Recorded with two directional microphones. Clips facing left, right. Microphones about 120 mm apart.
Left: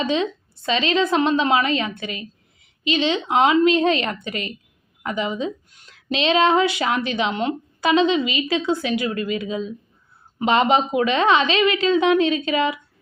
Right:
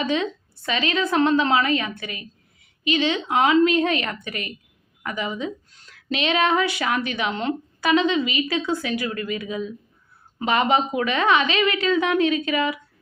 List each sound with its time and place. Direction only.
0.0 s a woman's voice: 20° left (ahead or behind)